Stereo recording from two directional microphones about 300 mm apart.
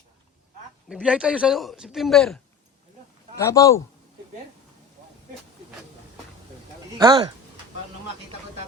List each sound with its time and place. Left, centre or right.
0.9 s a man's voice: centre
7.0 s speech: centre